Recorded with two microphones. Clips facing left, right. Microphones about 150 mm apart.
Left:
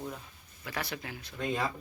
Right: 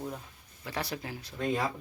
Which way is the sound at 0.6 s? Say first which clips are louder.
Right 2 dB; 30° right (ahead or behind).